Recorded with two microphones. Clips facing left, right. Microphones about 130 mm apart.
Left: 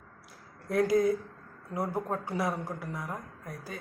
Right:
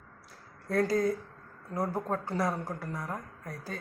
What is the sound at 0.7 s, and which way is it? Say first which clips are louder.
Speech: left 2 dB; 15° left (ahead or behind).